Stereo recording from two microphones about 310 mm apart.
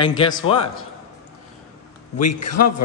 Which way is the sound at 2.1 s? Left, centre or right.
Left.